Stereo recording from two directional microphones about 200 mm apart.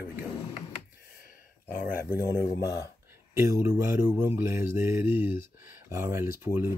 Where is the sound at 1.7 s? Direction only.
10° right (ahead or behind).